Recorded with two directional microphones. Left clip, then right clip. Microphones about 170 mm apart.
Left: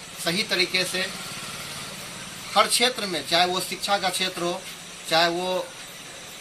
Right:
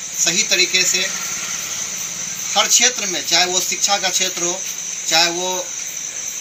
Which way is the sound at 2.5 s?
15° left (ahead or behind).